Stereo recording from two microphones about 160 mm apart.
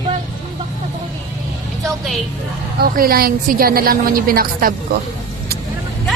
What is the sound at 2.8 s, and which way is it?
A woman's voice, 65° right (ahead or behind).